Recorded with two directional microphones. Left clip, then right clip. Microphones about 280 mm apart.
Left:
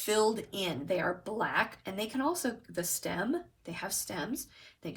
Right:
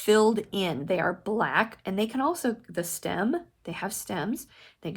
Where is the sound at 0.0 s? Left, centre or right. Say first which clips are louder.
Right 7 dB; right.